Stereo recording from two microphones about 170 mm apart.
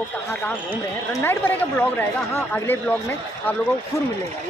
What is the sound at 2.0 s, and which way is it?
Speech, 10° left (ahead or behind).